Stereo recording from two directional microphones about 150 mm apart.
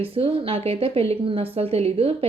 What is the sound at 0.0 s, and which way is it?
A woman's voice, 40° right (ahead or behind).